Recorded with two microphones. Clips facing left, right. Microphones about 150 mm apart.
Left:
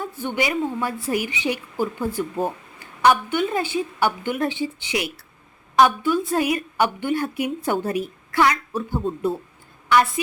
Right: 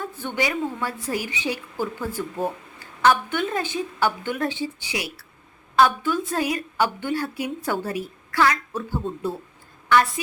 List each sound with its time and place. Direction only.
0.2 s a woman's voice: 15° left (ahead or behind)